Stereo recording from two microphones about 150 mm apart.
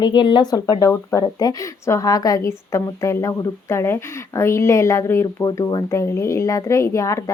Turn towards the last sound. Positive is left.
turn(degrees=20)  # may be behind; listen again after turning